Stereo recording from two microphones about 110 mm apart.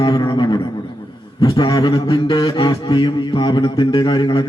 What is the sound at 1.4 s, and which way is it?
Mantra, 45° left (ahead or behind).